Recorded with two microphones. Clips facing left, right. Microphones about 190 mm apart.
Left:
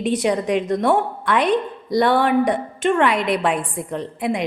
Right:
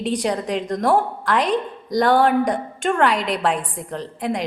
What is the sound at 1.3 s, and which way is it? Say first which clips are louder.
A woman's voice: left 2 dB; 35° right (ahead or behind).